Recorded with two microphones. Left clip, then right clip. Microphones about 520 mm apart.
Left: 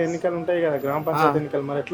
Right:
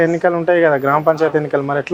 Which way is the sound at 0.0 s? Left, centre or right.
Right.